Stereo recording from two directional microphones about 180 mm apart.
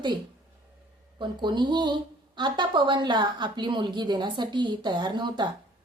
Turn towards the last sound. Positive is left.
turn(degrees=-25)  # may be behind; listen again after turning